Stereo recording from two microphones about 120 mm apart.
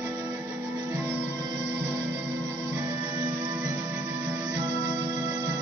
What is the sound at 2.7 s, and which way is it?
Music, 25° right (ahead or behind).